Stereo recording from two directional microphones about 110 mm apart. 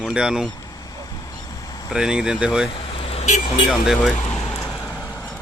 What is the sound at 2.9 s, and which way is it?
Vehicle, 60° left (ahead or behind).